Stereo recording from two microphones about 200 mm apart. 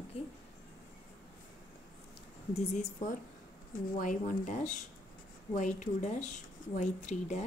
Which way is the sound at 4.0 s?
40° left (ahead or behind).